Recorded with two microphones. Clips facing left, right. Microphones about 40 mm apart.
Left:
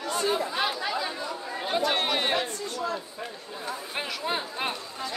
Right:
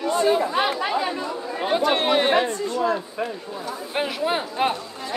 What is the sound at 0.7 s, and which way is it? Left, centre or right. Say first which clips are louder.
Speech: right 6 dB; right.